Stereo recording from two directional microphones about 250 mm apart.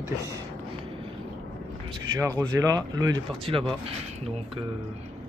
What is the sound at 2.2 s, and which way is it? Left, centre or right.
Speech, centre.